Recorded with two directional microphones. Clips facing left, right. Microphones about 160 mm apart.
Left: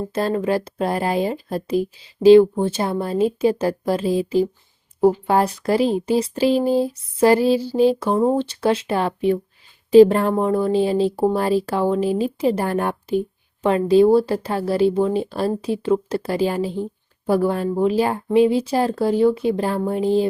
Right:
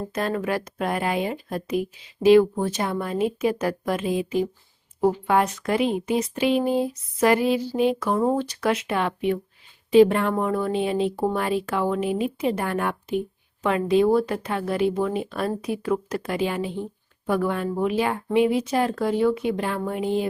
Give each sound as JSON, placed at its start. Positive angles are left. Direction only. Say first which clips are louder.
{"t": 0.1, "sound": "speech", "louder": "left 5 dB", "side_deg": 30}